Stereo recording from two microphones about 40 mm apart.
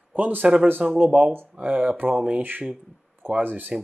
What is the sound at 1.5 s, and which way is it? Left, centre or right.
Speech, right.